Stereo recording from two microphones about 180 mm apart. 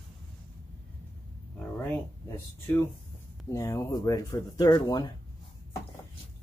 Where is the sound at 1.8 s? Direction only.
10° left (ahead or behind).